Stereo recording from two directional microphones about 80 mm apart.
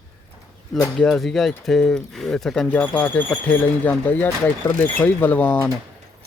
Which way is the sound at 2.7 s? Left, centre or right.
Centre.